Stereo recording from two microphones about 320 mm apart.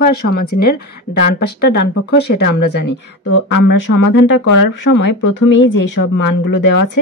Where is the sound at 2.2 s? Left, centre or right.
Left.